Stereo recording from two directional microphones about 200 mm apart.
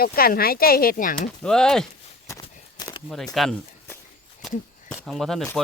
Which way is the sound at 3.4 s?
Centre (ahead or behind).